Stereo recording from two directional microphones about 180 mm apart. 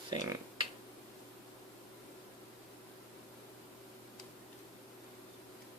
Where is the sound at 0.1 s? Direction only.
25° right (ahead or behind).